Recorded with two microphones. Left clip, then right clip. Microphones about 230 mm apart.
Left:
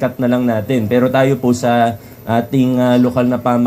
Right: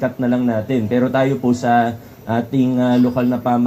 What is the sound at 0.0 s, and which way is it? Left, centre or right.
Speech, left.